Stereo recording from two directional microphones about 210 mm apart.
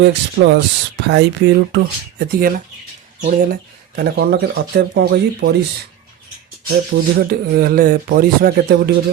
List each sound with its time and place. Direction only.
0.0 s speech: 55° right (ahead or behind)
6.9 s speech: 50° right (ahead or behind)